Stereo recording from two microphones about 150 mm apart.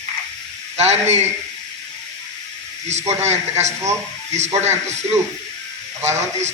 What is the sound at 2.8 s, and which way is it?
Speech, 50° right (ahead or behind).